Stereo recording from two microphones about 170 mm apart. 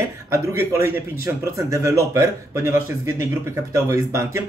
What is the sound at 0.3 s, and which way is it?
A man's voice, 15° right (ahead or behind).